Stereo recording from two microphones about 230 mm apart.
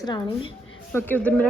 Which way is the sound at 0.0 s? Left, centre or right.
Left.